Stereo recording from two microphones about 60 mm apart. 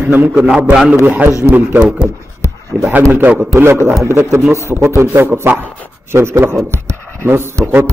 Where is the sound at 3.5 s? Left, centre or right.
Right.